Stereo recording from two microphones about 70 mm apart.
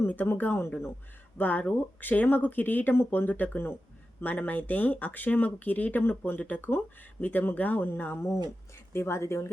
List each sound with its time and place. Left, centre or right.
0.0 s speech: left
8.9 s speech: left